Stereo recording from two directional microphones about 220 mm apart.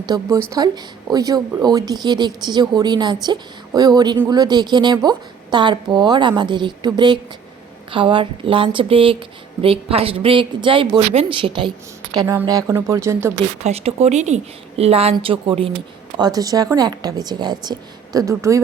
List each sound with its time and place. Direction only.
0.0 s a woman's voice: 15° right (ahead or behind)
13.6 s a woman's voice: 30° right (ahead or behind)